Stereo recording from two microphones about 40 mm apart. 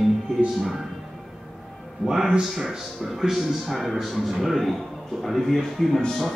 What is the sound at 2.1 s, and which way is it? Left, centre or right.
A man's voice, centre.